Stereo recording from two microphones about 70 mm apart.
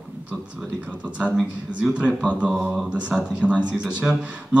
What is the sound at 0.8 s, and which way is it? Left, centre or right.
Speech, centre.